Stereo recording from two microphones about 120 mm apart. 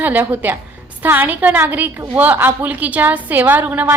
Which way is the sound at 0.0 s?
15° right (ahead or behind).